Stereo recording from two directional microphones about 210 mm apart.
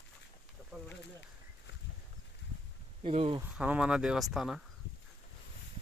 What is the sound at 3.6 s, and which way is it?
Speech, 5° right (ahead or behind).